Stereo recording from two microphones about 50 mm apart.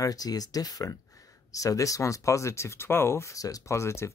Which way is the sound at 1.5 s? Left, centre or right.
Left.